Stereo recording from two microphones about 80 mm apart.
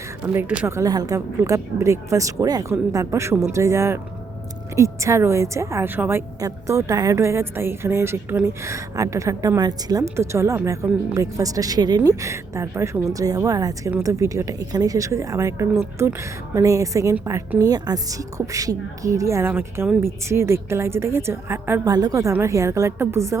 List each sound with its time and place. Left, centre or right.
0.2 s speech: right
0.7 s a woman's voice: right
10.2 s a woman's voice: right
11.9 s a woman's voice: right
13.1 s a woman's voice: right
17.6 s a woman's voice: right
21.8 s a woman's voice: right